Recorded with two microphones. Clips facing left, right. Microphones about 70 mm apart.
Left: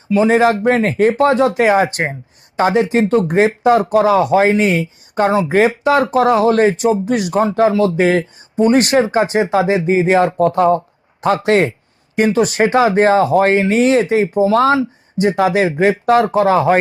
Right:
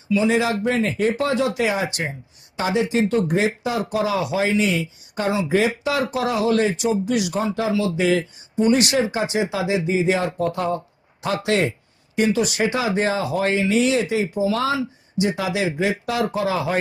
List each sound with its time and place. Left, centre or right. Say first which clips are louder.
0.1 s speech: left 7 dB; left